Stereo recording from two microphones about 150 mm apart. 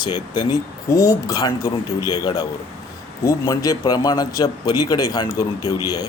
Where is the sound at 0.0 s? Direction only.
25° left (ahead or behind).